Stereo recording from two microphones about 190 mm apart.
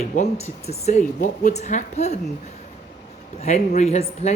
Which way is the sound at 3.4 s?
35° left (ahead or behind).